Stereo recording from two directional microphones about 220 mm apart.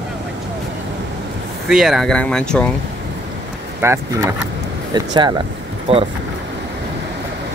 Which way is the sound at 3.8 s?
10° right (ahead or behind).